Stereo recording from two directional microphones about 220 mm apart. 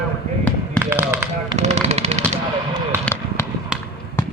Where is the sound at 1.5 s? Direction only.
30° right (ahead or behind).